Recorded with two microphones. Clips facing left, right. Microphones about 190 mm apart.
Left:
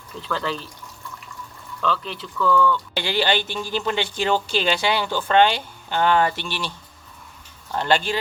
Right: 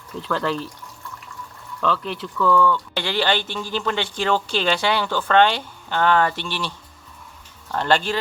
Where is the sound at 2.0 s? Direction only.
55° right (ahead or behind).